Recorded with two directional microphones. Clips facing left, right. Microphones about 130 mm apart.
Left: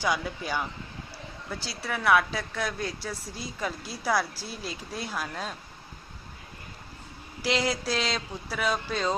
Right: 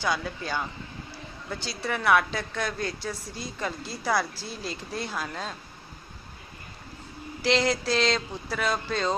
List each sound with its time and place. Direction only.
0.0 s speech: 10° left (ahead or behind)
1.6 s a woman's voice: 5° left (ahead or behind)
7.4 s a woman's voice: 5° left (ahead or behind)